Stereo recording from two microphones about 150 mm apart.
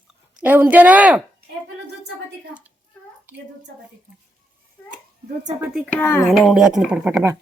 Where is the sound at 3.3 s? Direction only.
10° right (ahead or behind).